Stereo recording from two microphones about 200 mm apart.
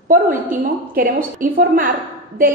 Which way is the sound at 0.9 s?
45° right (ahead or behind).